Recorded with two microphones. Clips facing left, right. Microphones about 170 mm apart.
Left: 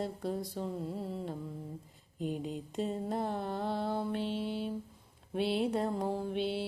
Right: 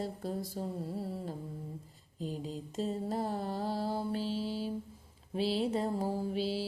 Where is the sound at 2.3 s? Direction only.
Centre (ahead or behind).